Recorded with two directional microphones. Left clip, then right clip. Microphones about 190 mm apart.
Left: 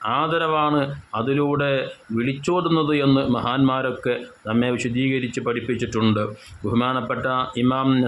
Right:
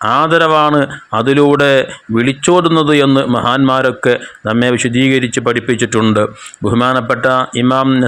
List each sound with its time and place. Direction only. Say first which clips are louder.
0.0 s speech: right 11 dB; 35° right (ahead or behind)